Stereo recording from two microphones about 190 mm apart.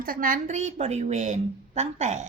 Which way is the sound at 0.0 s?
50° right (ahead or behind).